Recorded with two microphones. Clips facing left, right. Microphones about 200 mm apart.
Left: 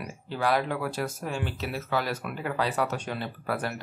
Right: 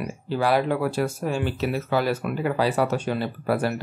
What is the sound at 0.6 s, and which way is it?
Speech, 25° right (ahead or behind).